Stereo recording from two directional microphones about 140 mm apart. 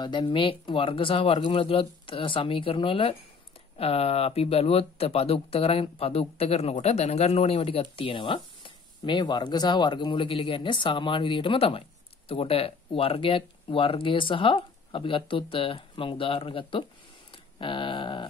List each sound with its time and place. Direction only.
0.0 s speech: 35° left (ahead or behind)